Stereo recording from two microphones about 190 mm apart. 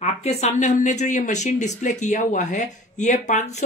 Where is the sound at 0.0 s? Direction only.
35° left (ahead or behind).